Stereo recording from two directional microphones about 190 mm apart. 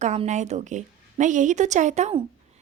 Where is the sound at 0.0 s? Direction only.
35° right (ahead or behind).